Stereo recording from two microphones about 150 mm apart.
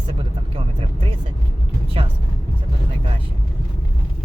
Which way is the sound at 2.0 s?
35° right (ahead or behind).